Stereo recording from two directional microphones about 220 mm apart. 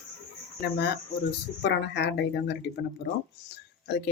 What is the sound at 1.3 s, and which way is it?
Speech, 50° left (ahead or behind).